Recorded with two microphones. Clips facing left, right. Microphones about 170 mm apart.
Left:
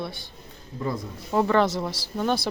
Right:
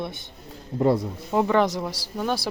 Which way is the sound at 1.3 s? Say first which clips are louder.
Even; 15° right (ahead or behind).